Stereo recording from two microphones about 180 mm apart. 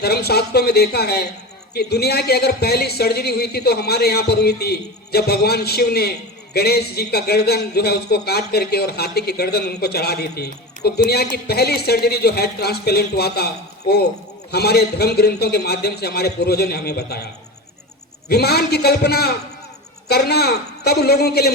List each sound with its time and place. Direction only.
0.0 s speech: 60° left (ahead or behind)
18.3 s speech: 60° left (ahead or behind)